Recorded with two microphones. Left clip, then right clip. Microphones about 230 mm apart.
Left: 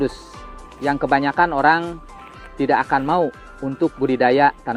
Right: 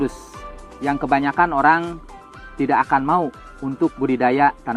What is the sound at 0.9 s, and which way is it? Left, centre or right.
Speech, right.